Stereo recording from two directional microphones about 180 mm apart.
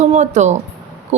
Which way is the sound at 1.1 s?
40° right (ahead or behind).